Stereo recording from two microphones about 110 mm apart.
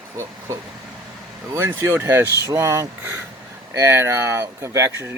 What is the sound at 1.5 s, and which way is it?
Speech, 20° right (ahead or behind).